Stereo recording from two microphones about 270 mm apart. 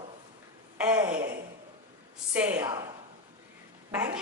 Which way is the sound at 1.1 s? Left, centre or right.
Right.